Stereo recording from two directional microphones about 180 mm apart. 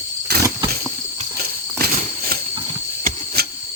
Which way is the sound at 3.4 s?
60° right (ahead or behind).